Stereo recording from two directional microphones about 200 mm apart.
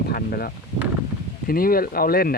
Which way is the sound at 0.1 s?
50° left (ahead or behind).